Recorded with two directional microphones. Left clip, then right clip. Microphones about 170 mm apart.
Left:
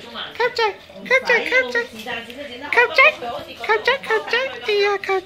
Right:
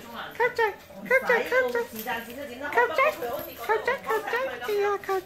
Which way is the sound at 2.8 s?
10° left (ahead or behind).